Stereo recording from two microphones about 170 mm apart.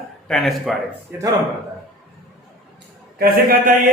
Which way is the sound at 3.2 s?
60° right (ahead or behind).